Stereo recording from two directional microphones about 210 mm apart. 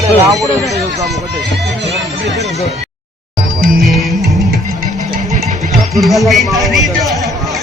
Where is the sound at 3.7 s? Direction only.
Centre (ahead or behind).